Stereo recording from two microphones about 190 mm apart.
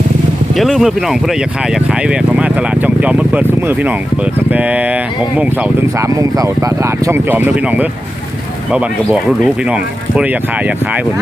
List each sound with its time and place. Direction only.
0.5 s speech: centre (ahead or behind)
9.4 s speech: 5° right (ahead or behind)